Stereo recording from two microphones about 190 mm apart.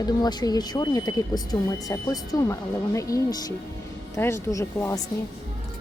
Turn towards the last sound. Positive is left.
turn(degrees=15)  # may be behind; listen again after turning